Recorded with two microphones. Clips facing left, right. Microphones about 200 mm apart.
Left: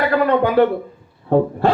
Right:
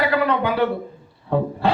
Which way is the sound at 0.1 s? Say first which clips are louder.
Left 4 dB; 50° left (ahead or behind).